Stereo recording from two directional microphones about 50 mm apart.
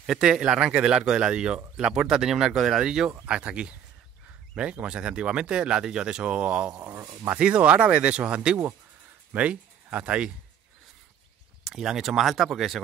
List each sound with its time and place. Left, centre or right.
0.0 s speech: centre
3.3 s speech: right
6.8 s speech: right
7.1 s speech: right
11.6 s speech: centre